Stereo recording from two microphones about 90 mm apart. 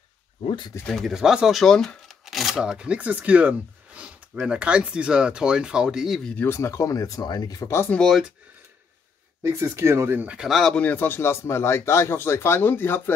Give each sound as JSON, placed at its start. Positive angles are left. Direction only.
{"t": 0.8, "sound": "speech", "side_deg": 5}
{"t": 1.1, "sound": "speech", "side_deg": -5}
{"t": 6.4, "sound": "speech", "side_deg": 30}
{"t": 9.4, "sound": "speech", "side_deg": -35}
{"t": 10.1, "sound": "speech", "side_deg": -15}
{"t": 10.6, "sound": "a man's voice", "side_deg": 10}